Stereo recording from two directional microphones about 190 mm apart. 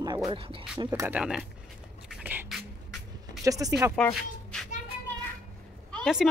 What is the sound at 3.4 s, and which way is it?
Speech, 15° right (ahead or behind).